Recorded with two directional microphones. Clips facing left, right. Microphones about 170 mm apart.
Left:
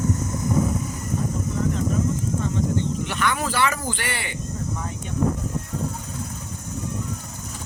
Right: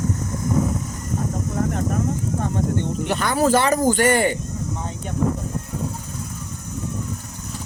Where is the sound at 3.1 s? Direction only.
35° right (ahead or behind).